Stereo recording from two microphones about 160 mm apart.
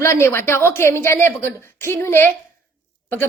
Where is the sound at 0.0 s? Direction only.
15° left (ahead or behind).